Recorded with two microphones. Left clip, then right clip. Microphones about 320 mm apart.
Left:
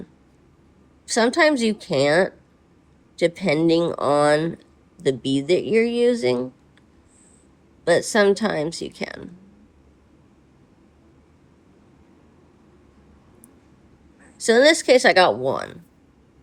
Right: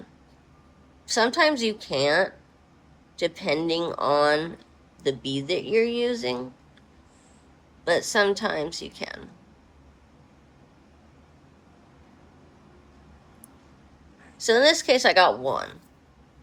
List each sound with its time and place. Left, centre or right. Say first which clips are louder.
1.0 s speech: left 3 dB; left
7.9 s speech: left 5 dB; left
14.4 s speech: left 4 dB; left